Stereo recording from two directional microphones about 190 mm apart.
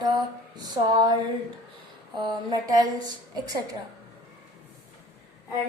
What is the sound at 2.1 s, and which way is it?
A woman's voice, 20° right (ahead or behind).